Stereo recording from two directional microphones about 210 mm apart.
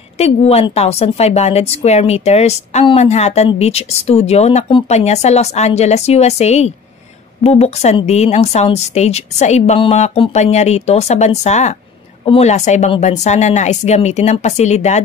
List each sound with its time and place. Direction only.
0.2 s a woman's voice: 30° left (ahead or behind)